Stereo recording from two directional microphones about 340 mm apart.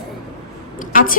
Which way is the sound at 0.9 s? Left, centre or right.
Left.